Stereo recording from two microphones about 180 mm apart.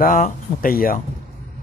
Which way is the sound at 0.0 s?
50° left (ahead or behind).